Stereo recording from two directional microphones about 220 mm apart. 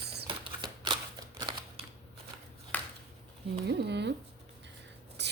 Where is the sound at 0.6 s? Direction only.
20° right (ahead or behind).